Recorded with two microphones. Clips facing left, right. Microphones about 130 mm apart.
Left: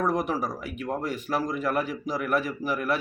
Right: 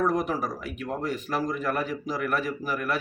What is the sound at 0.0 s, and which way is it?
Speech, 5° left (ahead or behind).